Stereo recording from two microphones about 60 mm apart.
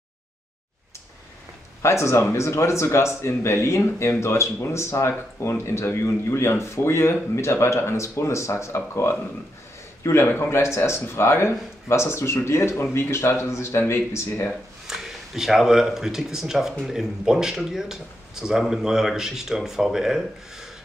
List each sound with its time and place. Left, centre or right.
1.8 s speech: left
14.9 s speech: centre